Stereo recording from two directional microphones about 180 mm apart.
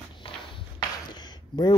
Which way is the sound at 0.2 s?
30° left (ahead or behind).